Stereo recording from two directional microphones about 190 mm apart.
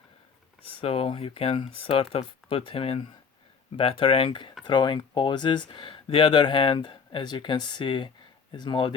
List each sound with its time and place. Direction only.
0.8 s speech: 30° left (ahead or behind)